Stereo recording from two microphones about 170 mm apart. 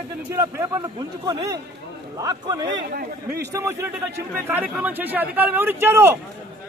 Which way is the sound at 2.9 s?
70° right (ahead or behind).